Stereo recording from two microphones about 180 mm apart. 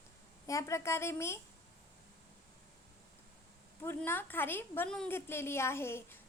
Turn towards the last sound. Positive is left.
turn(degrees=15)  # may be behind; listen again after turning